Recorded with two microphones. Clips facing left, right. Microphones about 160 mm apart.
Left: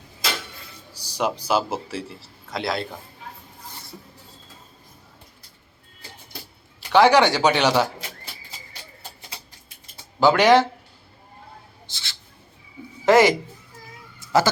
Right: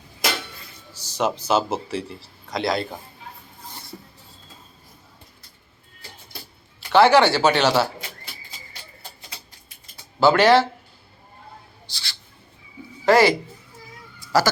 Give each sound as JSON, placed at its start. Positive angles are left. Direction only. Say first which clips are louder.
{"t": 0.9, "sound": "a man's voice", "louder": "right 1 dB", "side_deg": 10}
{"t": 6.7, "sound": "a man's voice", "louder": "right 1 dB", "side_deg": 15}
{"t": 10.2, "sound": "a man's voice", "louder": "even", "side_deg": 15}
{"t": 11.9, "sound": "a sound", "louder": "right 2 dB", "side_deg": 20}
{"t": 13.1, "sound": "speech", "louder": "left 1 dB", "side_deg": 20}